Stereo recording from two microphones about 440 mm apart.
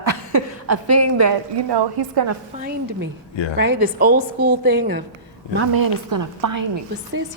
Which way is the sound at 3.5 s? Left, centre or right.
Right.